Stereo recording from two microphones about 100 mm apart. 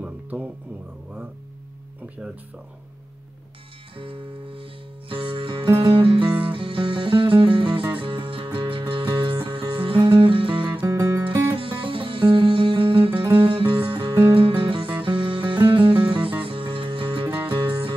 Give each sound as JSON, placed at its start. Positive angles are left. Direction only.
{"t": 0.0, "sound": "music", "side_deg": -15}
{"t": 3.9, "sound": "music", "side_deg": -60}
{"t": 10.8, "sound": "music", "side_deg": -25}
{"t": 11.5, "sound": "music", "side_deg": -60}